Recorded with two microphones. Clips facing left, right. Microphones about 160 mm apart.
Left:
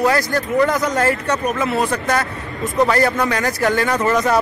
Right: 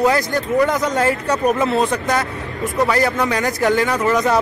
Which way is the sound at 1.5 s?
20° right (ahead or behind).